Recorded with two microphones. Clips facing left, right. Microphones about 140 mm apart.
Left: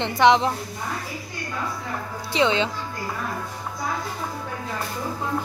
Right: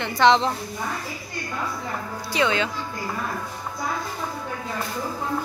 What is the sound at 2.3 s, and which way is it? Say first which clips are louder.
Speech: left 2 dB; 20° left (ahead or behind).